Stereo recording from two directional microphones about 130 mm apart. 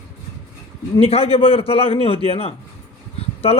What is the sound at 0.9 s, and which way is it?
Speech, 50° left (ahead or behind).